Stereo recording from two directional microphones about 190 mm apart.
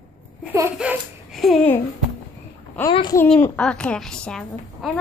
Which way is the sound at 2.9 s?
25° left (ahead or behind).